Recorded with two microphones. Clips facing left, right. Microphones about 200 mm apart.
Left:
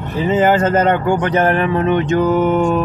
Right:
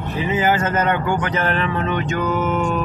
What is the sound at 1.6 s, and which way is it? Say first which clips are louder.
Mantra: left 7 dB; 35° left (ahead or behind).